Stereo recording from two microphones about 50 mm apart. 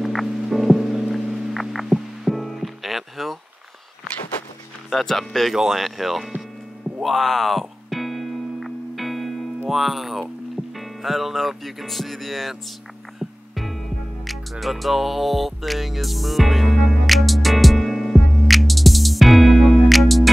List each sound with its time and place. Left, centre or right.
0.0 s music: centre
4.8 s speech: centre
7.0 s music: centre
9.7 s speech: centre
13.2 s music: centre